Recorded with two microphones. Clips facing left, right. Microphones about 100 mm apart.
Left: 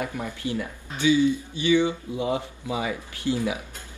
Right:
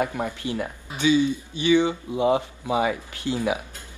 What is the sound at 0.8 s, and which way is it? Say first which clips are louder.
Speech: even; 20° right (ahead or behind).